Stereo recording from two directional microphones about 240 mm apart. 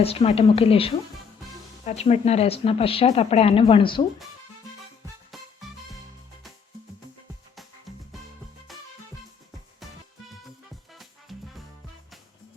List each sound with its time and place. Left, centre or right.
0.0 s speech: left
8.7 s music: centre